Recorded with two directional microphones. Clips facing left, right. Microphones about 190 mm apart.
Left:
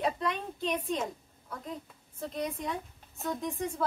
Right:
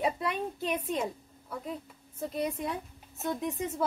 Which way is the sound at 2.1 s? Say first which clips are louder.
Right 2 dB; 10° right (ahead or behind).